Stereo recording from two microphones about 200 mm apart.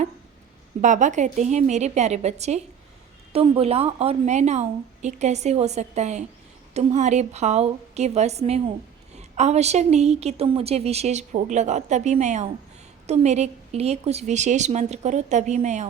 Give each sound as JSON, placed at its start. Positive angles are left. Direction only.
{"t": 0.8, "sound": "a woman's voice", "side_deg": -40}